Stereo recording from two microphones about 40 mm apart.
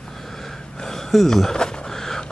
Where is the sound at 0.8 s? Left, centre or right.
Centre.